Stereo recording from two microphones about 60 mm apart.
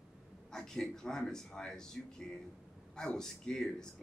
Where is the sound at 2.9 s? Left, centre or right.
Centre.